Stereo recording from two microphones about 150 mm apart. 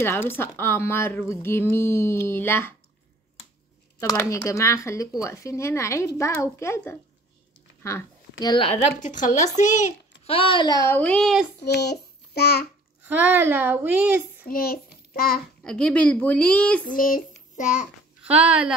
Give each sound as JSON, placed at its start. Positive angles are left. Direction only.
{"t": 0.0, "sound": "a woman's voice", "side_deg": 15}
{"t": 4.0, "sound": "a woman's voice", "side_deg": 20}
{"t": 8.6, "sound": "a child's voice", "side_deg": 50}
{"t": 10.3, "sound": "speech", "side_deg": 35}
{"t": 10.9, "sound": "speech", "side_deg": 10}
{"t": 11.6, "sound": "a child's voice", "side_deg": 90}
{"t": 13.0, "sound": "speech", "side_deg": -10}
{"t": 14.4, "sound": "a child's voice", "side_deg": 85}
{"t": 15.6, "sound": "a woman's voice", "side_deg": 5}
{"t": 16.8, "sound": "speech", "side_deg": 65}
{"t": 18.2, "sound": "speech", "side_deg": -10}